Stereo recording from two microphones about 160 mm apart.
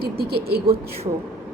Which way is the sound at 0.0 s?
80° right.